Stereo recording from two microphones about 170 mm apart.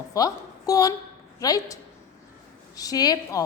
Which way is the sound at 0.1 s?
20° left (ahead or behind).